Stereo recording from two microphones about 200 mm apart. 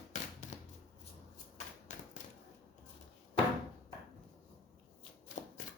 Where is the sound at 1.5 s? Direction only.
40° left (ahead or behind).